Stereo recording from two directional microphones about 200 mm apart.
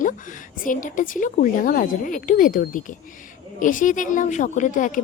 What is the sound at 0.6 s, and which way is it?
A woman's voice, 40° left (ahead or behind).